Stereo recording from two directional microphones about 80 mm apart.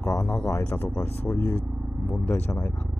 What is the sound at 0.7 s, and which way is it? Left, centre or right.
Speech, left.